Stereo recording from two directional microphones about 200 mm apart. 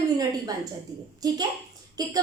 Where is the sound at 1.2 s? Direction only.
20° right (ahead or behind).